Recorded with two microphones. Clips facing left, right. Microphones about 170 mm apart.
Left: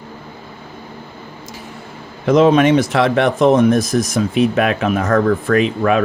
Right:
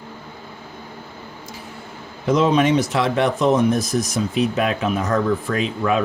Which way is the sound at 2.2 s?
65° left (ahead or behind).